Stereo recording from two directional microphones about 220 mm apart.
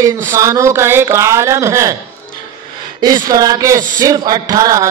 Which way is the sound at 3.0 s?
15° right (ahead or behind).